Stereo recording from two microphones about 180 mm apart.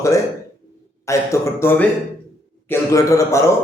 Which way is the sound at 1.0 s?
15° left (ahead or behind).